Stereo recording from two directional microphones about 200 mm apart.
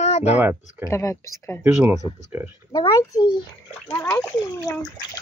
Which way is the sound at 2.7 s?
20° left (ahead or behind).